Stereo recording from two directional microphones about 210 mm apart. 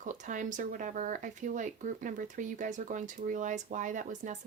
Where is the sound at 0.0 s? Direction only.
35° right (ahead or behind).